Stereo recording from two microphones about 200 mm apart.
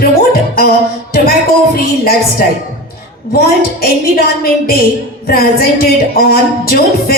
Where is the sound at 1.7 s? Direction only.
50° left (ahead or behind).